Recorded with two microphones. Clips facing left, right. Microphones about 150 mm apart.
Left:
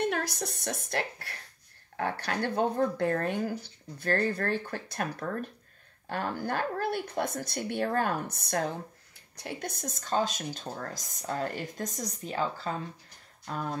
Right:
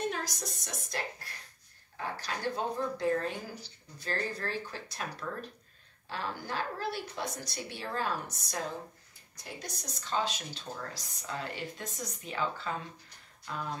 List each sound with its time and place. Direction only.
0.1 s speech: 60° left (ahead or behind)
6.0 s speech: 55° left (ahead or behind)